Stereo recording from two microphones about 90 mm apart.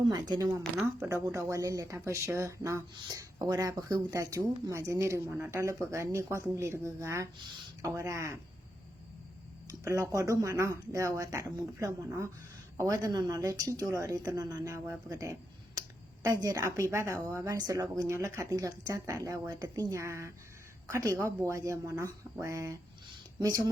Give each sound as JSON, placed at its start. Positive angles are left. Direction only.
{"t": 0.1, "sound": "speech", "side_deg": -45}
{"t": 9.6, "sound": "speech", "side_deg": -35}